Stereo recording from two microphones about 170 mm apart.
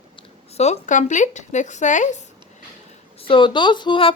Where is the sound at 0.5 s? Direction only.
40° left (ahead or behind).